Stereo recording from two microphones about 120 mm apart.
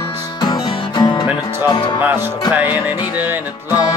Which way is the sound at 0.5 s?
35° left (ahead or behind).